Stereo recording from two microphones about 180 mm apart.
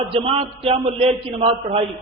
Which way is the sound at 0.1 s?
30° right (ahead or behind).